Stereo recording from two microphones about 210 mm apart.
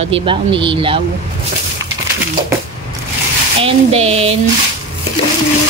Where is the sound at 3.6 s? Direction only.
25° right (ahead or behind).